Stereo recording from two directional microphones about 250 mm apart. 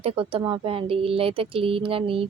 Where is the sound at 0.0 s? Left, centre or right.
Right.